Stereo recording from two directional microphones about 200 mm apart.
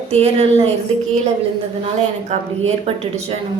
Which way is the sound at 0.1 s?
30° right (ahead or behind).